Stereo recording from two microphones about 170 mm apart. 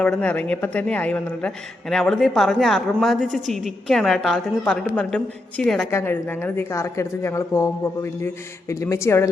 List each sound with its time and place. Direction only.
0.0 s a woman's voice: 5° left (ahead or behind)
5.9 s a woman's voice: 15° left (ahead or behind)